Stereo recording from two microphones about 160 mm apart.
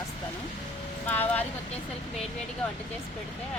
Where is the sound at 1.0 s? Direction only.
10° left (ahead or behind).